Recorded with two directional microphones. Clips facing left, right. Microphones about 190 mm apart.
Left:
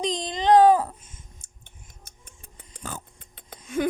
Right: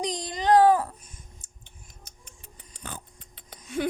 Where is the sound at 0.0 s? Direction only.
25° left (ahead or behind).